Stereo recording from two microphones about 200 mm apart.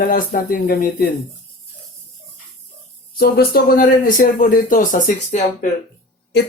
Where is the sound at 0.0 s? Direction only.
45° left (ahead or behind).